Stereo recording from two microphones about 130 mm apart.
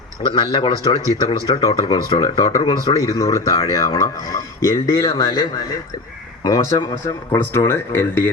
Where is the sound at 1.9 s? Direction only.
45° left (ahead or behind).